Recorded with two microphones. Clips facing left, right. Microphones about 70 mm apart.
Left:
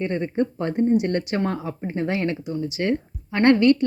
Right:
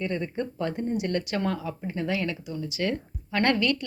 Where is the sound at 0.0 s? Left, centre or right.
Left.